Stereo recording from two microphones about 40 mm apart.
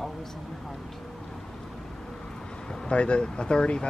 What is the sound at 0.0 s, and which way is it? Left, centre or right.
Speech, centre.